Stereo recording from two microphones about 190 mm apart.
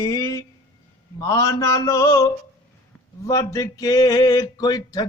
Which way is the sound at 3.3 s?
15° left (ahead or behind).